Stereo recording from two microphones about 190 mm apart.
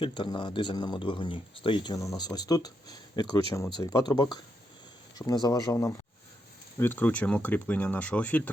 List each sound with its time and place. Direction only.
0.0 s speech: 25° left (ahead or behind); by 8.4 s 10° left (ahead or behind)